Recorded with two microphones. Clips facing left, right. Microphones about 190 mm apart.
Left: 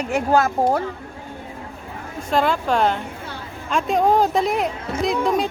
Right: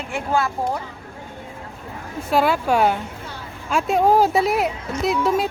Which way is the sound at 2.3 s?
5° right (ahead or behind).